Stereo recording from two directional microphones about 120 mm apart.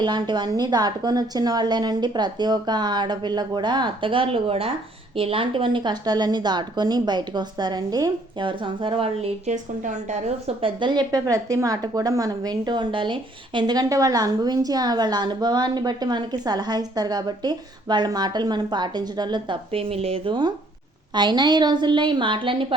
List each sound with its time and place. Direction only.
0.0 s a woman's voice: 40° right (ahead or behind)
9.5 s a woman's voice: 90° right
10.4 s a woman's voice: 45° right (ahead or behind)